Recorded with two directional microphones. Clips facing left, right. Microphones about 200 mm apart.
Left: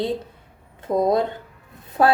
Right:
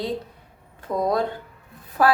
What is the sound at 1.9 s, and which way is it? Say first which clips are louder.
Music: left 2 dB; 25° left (ahead or behind).